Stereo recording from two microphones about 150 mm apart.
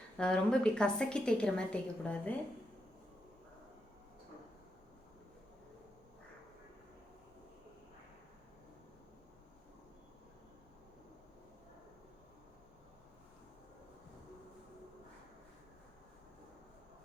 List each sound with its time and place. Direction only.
0.2 s a woman's voice: 5° left (ahead or behind)